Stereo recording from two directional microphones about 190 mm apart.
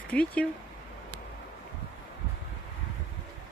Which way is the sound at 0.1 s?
5° left (ahead or behind).